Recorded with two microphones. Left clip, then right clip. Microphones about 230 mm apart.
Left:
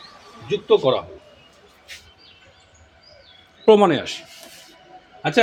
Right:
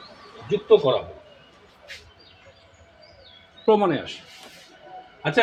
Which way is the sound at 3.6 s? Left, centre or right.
Left.